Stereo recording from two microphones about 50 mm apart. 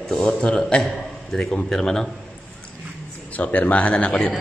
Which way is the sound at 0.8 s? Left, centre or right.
Centre.